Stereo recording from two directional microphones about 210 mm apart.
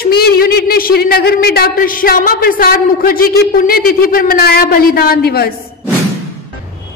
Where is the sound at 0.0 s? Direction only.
45° left (ahead or behind).